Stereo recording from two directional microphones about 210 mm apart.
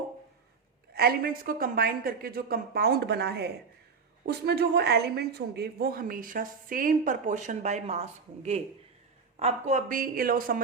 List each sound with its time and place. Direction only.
0.9 s a woman's voice: 45° right (ahead or behind)
9.4 s speech: 30° right (ahead or behind)